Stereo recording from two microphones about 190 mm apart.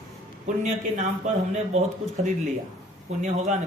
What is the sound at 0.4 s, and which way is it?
Speech, 40° right (ahead or behind).